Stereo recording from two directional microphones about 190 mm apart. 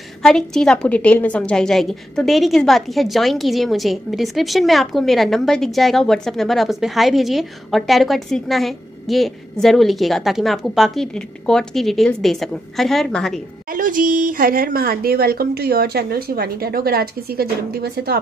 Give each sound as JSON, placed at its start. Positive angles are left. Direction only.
{"t": 0.2, "sound": "a woman's voice", "side_deg": 5}
{"t": 13.7, "sound": "speech", "side_deg": -45}